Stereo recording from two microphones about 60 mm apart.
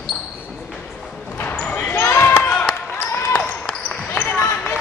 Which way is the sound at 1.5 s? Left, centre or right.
Left.